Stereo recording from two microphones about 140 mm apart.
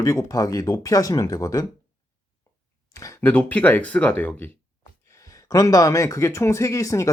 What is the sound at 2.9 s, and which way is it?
Speech, 25° left (ahead or behind).